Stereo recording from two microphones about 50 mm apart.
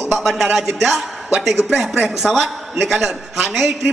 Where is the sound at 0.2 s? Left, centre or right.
Centre.